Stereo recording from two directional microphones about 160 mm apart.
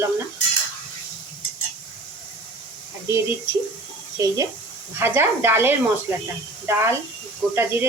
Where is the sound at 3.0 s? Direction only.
15° right (ahead or behind).